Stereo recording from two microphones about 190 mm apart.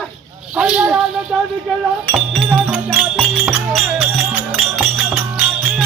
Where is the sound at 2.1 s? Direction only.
5° right (ahead or behind).